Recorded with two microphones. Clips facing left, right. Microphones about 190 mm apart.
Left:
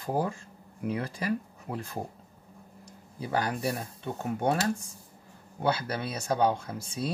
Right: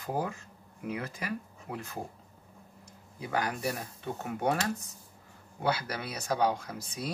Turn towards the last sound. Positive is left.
turn(degrees=25)  # may be behind; listen again after turning